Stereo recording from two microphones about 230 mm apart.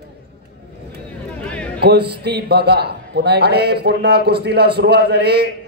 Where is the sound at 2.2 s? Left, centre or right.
Right.